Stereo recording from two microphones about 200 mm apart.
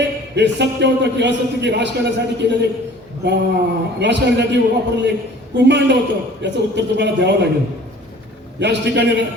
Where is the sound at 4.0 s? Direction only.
60° right (ahead or behind).